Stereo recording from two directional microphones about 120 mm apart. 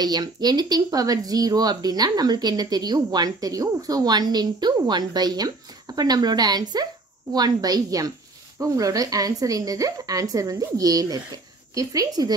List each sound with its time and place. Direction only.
0.0 s a woman's voice: 35° right (ahead or behind)